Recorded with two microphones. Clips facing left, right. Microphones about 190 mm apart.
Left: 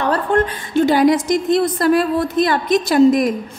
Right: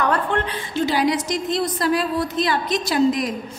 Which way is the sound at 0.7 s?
50° left (ahead or behind).